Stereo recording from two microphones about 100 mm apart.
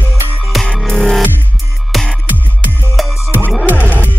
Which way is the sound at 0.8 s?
5° left (ahead or behind).